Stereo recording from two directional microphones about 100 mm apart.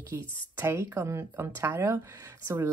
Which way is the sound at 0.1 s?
20° right (ahead or behind).